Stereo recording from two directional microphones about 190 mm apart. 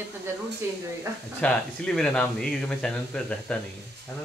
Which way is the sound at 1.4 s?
5° left (ahead or behind).